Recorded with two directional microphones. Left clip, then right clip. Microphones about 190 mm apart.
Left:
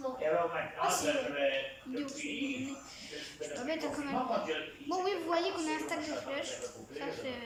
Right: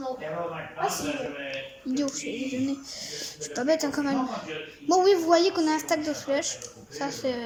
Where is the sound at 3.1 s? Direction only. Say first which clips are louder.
Right 7 dB; 55° right (ahead or behind).